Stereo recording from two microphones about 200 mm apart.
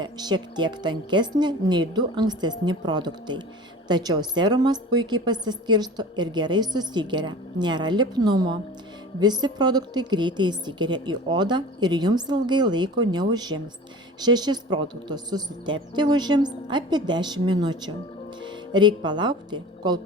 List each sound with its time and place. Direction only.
0.0 s a woman's voice: 20° right (ahead or behind)